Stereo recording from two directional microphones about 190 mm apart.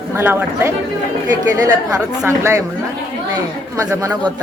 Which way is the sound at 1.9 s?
5° right (ahead or behind).